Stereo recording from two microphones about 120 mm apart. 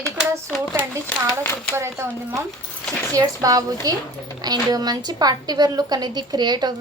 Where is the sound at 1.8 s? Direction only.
25° right (ahead or behind).